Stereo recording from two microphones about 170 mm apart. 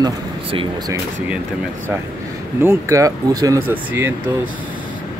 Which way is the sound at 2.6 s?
15° right (ahead or behind).